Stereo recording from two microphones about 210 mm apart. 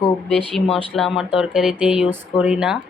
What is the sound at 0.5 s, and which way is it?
Speech, centre (ahead or behind).